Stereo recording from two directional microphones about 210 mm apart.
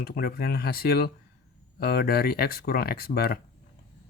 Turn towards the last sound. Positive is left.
turn(degrees=45)  # may be behind; listen again after turning